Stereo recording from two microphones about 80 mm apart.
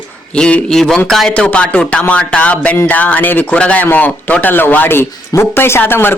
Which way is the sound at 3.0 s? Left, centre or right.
Centre.